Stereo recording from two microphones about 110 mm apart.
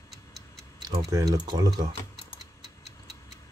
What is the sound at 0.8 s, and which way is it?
Speech, 35° right (ahead or behind).